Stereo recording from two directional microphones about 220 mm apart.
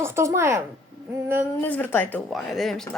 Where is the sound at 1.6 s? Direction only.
10° left (ahead or behind).